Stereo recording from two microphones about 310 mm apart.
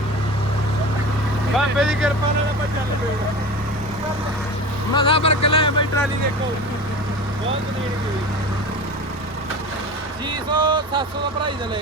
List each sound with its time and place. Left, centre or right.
1.5 s speech: centre
4.9 s speech: centre
10.5 s speech: centre